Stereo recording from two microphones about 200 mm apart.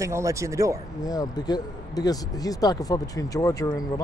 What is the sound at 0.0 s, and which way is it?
Speech, 15° right (ahead or behind).